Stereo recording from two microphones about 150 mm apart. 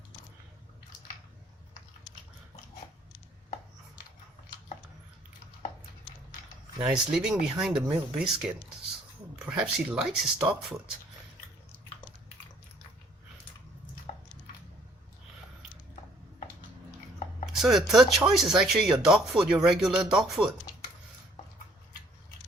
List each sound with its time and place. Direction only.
6.8 s speech: 5° right (ahead or behind)
14.1 s squish: 50° left (ahead or behind)
17.6 s speech: centre (ahead or behind)